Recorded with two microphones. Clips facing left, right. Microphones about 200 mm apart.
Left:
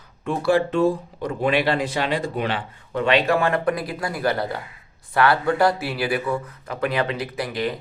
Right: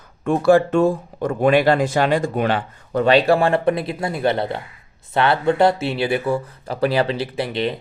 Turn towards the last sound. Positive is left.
turn(degrees=-25)  # may be behind; listen again after turning